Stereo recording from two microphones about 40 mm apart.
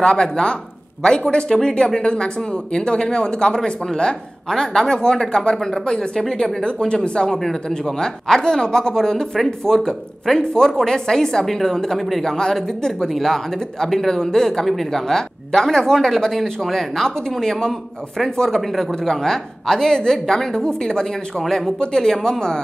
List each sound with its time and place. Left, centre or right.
0.0 s speech: left
10.4 s speech: left